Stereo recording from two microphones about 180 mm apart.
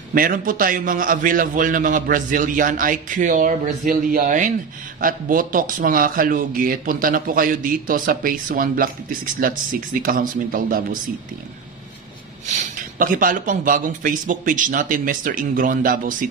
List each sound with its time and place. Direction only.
0.1 s a man's voice: 50° right (ahead or behind)
12.4 s a man's voice: 45° right (ahead or behind)